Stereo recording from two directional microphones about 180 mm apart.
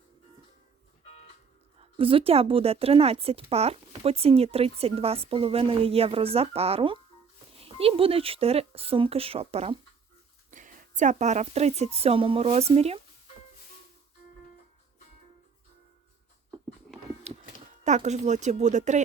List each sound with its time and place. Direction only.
1.8 s speech: 30° right (ahead or behind)
10.5 s speech: 45° right (ahead or behind)
17.3 s music: 40° right (ahead or behind)
17.8 s speech: 40° right (ahead or behind)